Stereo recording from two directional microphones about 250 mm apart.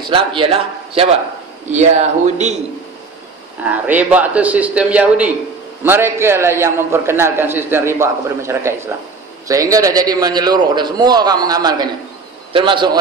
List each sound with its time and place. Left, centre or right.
0.0 s speech: centre
3.6 s a man's voice: centre